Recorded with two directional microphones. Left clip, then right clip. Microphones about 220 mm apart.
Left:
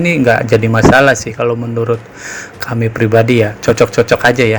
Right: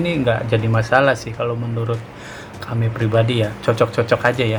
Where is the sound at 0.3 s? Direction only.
30° left (ahead or behind).